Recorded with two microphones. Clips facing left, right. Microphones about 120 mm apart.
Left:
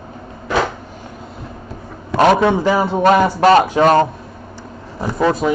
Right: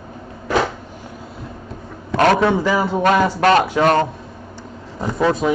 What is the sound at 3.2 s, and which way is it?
Speech, 15° left (ahead or behind).